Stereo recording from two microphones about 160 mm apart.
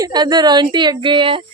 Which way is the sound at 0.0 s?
25° right (ahead or behind).